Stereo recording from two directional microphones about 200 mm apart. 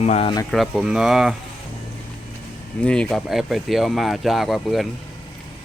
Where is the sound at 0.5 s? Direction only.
Centre (ahead or behind).